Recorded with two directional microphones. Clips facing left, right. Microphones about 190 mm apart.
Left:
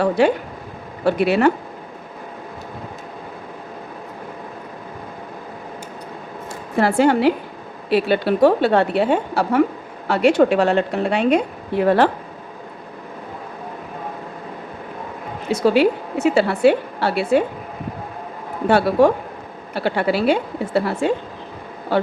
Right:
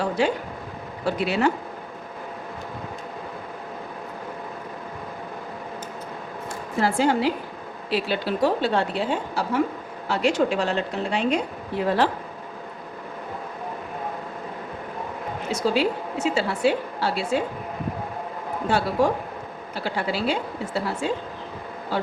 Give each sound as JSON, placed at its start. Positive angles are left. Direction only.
{"t": 0.0, "sound": "speech", "side_deg": 60}
{"t": 6.7, "sound": "speech", "side_deg": 60}
{"t": 15.4, "sound": "speech", "side_deg": 65}
{"t": 18.7, "sound": "speech", "side_deg": 65}